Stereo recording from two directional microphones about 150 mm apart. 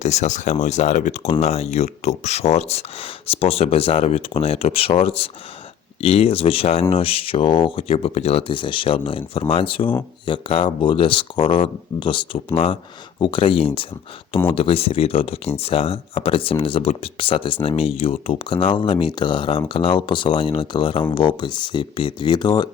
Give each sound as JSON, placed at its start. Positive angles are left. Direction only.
{"t": 0.0, "sound": "speech", "side_deg": 50}